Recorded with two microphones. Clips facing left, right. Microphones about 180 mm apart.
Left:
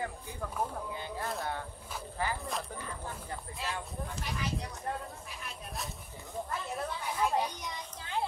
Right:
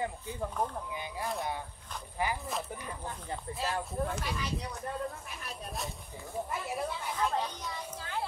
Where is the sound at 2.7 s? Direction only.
15° right (ahead or behind).